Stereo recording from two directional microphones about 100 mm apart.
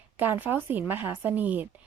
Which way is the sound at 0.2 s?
20° right (ahead or behind).